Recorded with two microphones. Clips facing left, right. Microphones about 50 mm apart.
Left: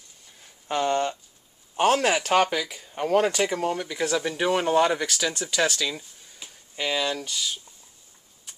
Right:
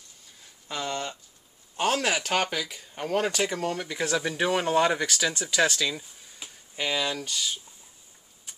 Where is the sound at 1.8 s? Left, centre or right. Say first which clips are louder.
Left 5 dB; centre.